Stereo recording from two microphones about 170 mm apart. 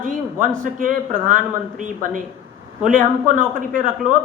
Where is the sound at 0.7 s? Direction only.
50° right (ahead or behind).